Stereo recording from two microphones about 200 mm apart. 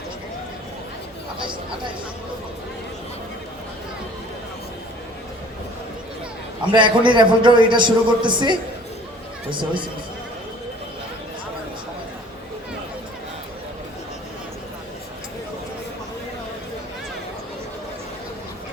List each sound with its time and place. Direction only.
6.7 s a man's voice: 25° right (ahead or behind)